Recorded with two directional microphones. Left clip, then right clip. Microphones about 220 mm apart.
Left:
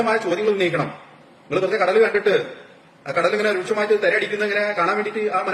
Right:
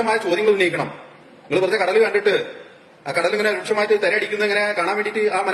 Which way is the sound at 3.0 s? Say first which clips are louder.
Even; 5° left (ahead or behind).